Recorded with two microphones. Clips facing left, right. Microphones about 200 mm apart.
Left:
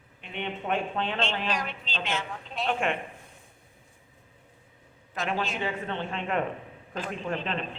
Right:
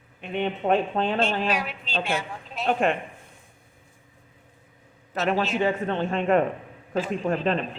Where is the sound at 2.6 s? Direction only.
40° right (ahead or behind).